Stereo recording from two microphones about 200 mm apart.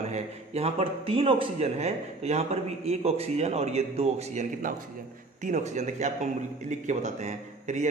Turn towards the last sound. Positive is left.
turn(degrees=-35)  # may be behind; listen again after turning